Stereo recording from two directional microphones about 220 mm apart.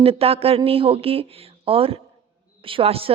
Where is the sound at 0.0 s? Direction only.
25° right (ahead or behind).